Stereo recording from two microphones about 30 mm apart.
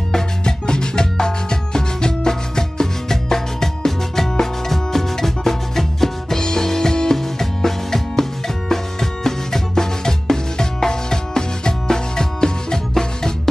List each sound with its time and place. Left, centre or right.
0.1 s music: left